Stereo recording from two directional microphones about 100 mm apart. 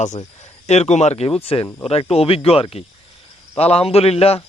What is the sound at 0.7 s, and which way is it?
Speech, 90° left.